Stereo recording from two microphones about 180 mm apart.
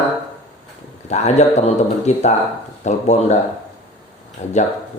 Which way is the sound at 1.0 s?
40° left (ahead or behind).